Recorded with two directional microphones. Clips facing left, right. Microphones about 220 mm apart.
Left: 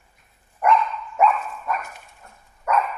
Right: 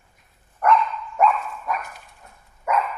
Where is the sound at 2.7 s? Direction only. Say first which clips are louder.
Left 1 dB; 10° right (ahead or behind).